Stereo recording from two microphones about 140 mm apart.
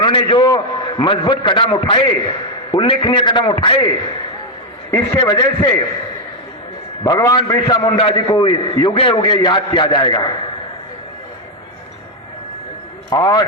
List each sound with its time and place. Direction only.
0.0 s a man's voice: 35° left (ahead or behind)
7.0 s a man's voice: 25° left (ahead or behind)
13.1 s a man's voice: 25° left (ahead or behind)